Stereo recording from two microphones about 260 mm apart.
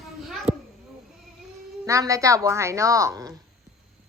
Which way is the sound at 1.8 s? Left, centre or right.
Centre.